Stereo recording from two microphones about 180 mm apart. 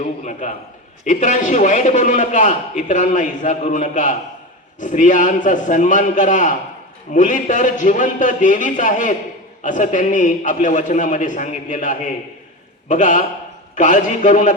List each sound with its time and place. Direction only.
0.0 s a man's voice: 45° left (ahead or behind)